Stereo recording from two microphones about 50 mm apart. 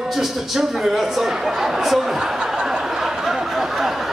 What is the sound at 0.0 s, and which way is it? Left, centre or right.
Speech, centre.